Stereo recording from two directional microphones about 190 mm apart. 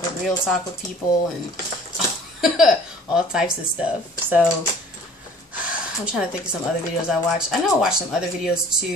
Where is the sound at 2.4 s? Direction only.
5° right (ahead or behind).